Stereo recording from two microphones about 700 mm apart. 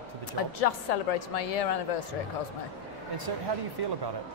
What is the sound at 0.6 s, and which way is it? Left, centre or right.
A woman's voice, left.